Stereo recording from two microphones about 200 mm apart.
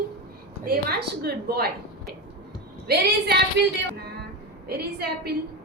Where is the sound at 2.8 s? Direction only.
50° right (ahead or behind).